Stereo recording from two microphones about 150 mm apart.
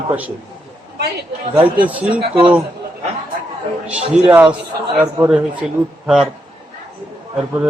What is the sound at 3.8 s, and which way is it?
Speech, 10° right (ahead or behind).